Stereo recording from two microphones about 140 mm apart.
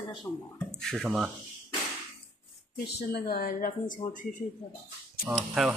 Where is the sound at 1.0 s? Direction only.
5° right (ahead or behind).